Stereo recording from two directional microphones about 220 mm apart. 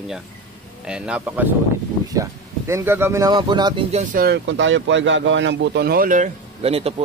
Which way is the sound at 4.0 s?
40° right (ahead or behind).